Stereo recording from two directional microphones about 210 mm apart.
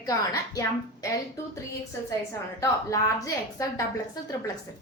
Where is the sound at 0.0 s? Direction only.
15° left (ahead or behind).